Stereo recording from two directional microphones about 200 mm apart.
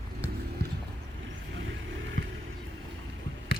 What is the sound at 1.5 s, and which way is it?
Vehicle, 70° right (ahead or behind).